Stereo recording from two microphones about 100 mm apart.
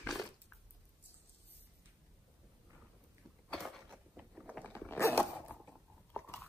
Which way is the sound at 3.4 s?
5° left (ahead or behind).